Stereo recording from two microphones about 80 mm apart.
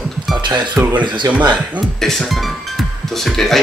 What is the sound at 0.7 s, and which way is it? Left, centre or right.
Speech, right.